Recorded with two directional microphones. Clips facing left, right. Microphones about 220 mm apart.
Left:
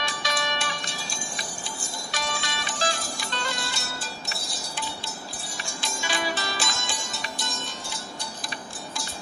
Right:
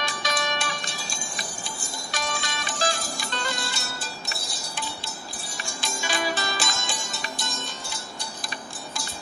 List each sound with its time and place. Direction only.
0.0 s music: 45° right (ahead or behind)
2.0 s music: 45° right (ahead or behind)
6.0 s music: 45° right (ahead or behind)